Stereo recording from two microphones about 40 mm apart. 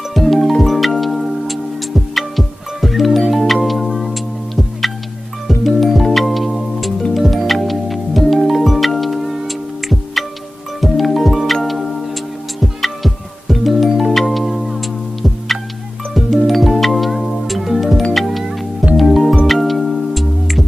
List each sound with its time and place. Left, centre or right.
0.1 s music: centre